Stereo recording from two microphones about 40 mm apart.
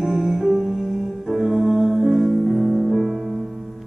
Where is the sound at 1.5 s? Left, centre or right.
Centre.